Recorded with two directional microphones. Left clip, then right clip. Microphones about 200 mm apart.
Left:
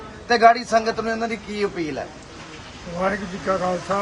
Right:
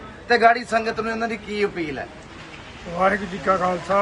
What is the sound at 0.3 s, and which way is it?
A man's voice, 30° left (ahead or behind).